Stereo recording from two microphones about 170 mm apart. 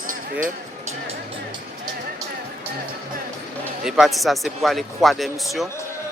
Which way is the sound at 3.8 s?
Centre (ahead or behind).